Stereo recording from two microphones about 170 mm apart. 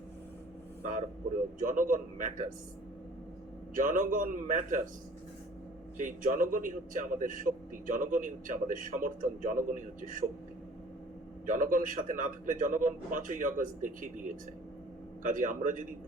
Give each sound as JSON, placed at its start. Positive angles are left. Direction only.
{"t": 0.8, "sound": "a man's voice", "side_deg": -50}
{"t": 3.8, "sound": "a man's voice", "side_deg": -50}
{"t": 6.0, "sound": "a man's voice", "side_deg": -50}
{"t": 11.4, "sound": "a man's voice", "side_deg": -50}
{"t": 15.2, "sound": "a man's voice", "side_deg": -50}